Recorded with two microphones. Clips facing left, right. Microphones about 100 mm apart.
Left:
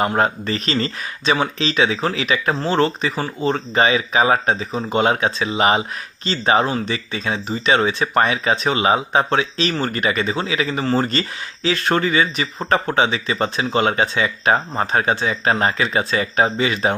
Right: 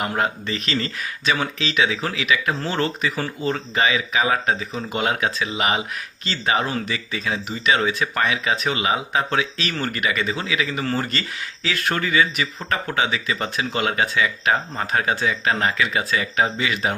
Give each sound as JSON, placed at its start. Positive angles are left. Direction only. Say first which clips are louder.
{"t": 0.0, "sound": "speech", "louder": "left 5 dB", "side_deg": 35}